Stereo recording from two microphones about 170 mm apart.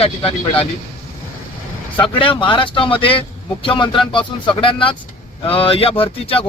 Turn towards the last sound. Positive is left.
turn(degrees=35)  # may be behind; listen again after turning